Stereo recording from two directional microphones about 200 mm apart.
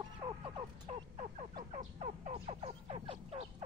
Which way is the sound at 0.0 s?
20° right (ahead or behind).